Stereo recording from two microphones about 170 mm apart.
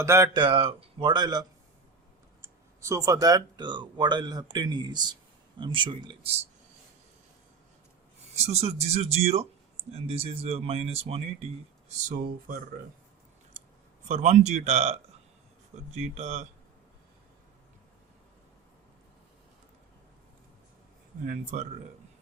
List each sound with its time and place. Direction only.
0.0 s speech: 15° right (ahead or behind)
0.3 s speech: 30° right (ahead or behind)
8.4 s speech: 40° right (ahead or behind)
11.9 s speech: 50° right (ahead or behind)
14.1 s speech: 45° right (ahead or behind)
21.2 s speech: 45° right (ahead or behind)